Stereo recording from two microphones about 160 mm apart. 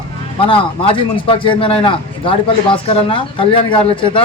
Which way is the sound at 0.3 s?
35° left (ahead or behind).